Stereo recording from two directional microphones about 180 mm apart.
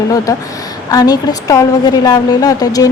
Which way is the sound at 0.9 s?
20° left (ahead or behind).